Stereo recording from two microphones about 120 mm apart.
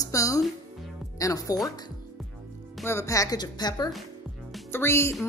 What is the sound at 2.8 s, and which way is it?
Speech, 25° left (ahead or behind).